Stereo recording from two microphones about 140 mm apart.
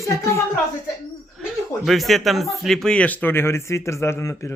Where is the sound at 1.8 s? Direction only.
Centre (ahead or behind).